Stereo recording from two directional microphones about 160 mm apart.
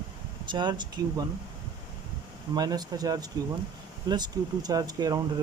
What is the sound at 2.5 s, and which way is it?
Speech, 25° right (ahead or behind).